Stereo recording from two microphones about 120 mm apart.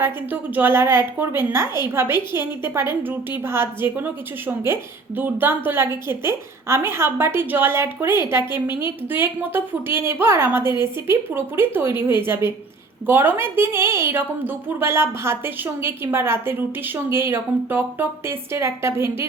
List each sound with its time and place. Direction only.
0.0 s a woman's voice: 15° right (ahead or behind)